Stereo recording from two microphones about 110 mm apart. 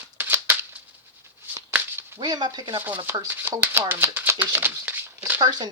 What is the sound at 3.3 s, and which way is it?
Speech, 20° right (ahead or behind).